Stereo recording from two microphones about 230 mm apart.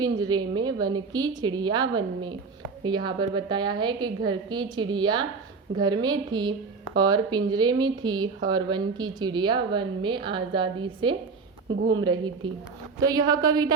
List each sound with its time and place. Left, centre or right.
0.0 s a woman's voice: centre